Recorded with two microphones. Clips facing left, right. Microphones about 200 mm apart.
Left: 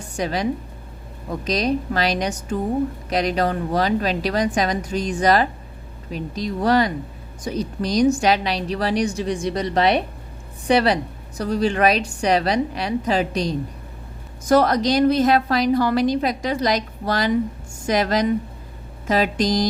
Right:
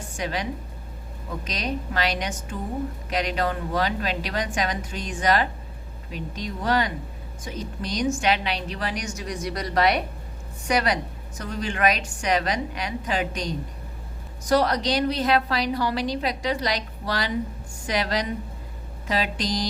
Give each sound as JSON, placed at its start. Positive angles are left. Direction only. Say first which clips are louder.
{"t": 0.2, "sound": "a woman's voice", "louder": "left 5 dB", "side_deg": 40}
{"t": 1.5, "sound": "a woman's voice", "louder": "left 9 dB", "side_deg": 40}
{"t": 14.4, "sound": "a woman's voice", "louder": "left 5 dB", "side_deg": 50}